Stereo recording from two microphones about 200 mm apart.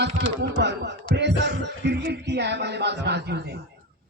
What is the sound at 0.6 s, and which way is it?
A man's voice, 60° right (ahead or behind).